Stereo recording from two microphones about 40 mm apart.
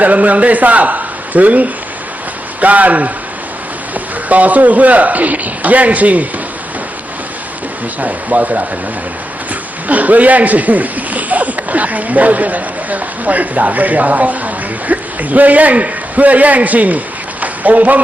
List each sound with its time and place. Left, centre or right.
0.0 s a man's voice: right
8.0 s speech: right
9.9 s speech: right
17.4 s a sound: right